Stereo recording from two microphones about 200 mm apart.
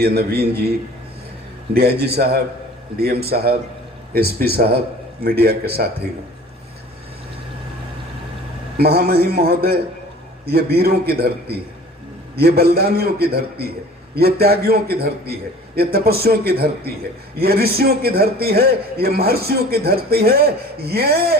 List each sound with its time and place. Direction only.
0.0 s a man's voice: 50° right (ahead or behind)
1.7 s a man's voice: 50° right (ahead or behind)
8.8 s a man's voice: 50° right (ahead or behind)